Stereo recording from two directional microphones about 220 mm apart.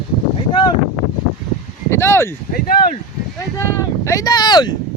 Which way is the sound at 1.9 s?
10° left (ahead or behind).